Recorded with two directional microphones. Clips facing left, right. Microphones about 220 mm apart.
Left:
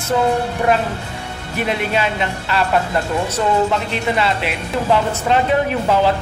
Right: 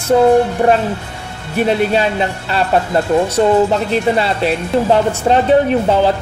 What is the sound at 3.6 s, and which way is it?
A woman's voice, 35° right (ahead or behind).